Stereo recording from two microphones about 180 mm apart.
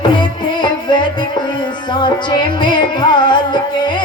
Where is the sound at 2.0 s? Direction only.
25° left (ahead or behind).